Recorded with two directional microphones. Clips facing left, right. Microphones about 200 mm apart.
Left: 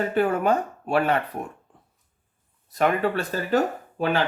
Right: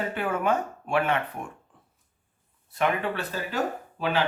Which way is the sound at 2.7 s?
40° left (ahead or behind).